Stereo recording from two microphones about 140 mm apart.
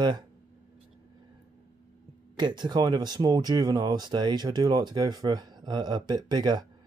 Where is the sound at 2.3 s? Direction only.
30° right (ahead or behind).